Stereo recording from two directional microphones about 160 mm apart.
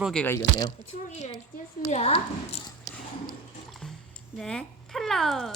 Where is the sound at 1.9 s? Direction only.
40° left (ahead or behind).